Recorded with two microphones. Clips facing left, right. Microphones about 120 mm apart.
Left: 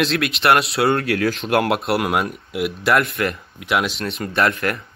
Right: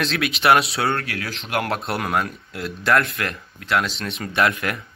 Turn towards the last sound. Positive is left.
turn(degrees=0)  # may be behind; listen again after turning